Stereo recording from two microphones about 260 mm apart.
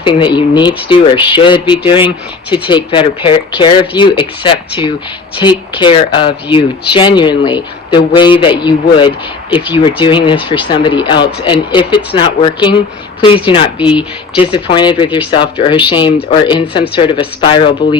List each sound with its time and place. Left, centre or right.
0.0 s speech: centre